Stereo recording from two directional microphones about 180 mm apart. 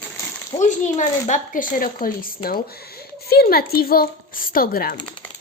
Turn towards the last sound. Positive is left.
turn(degrees=55)  # may be behind; listen again after turning